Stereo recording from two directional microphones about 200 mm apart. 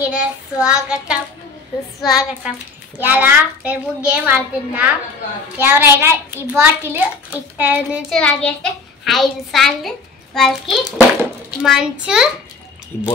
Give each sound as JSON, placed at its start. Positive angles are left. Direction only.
{"t": 0.1, "sound": "a child's voice", "side_deg": -5}
{"t": 8.2, "sound": "a child's voice", "side_deg": 5}
{"t": 12.9, "sound": "speech", "side_deg": 40}